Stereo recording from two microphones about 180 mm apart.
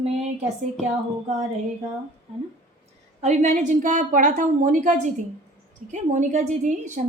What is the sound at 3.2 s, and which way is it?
A woman's voice, 40° right (ahead or behind).